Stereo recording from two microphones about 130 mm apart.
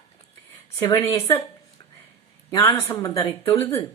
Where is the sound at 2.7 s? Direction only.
25° left (ahead or behind).